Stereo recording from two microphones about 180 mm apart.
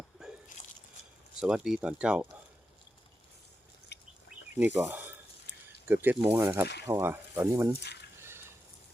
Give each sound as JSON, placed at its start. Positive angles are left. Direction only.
{"t": 0.2, "sound": "biting", "side_deg": 0}
{"t": 1.4, "sound": "speech", "side_deg": -5}
{"t": 3.9, "sound": "bird", "side_deg": 70}
{"t": 4.5, "sound": "speech", "side_deg": -10}
{"t": 7.8, "sound": "speech", "side_deg": 70}